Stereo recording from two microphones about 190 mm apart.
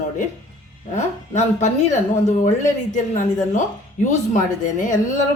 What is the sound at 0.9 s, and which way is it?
Speech, 40° left (ahead or behind).